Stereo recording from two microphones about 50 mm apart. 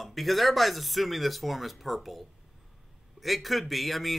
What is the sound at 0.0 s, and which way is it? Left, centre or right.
A man's voice, centre.